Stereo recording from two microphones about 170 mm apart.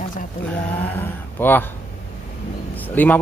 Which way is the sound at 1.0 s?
10° left (ahead or behind).